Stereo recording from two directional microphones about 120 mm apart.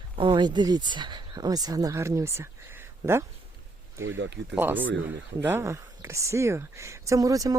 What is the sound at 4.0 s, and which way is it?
Speech, 20° right (ahead or behind).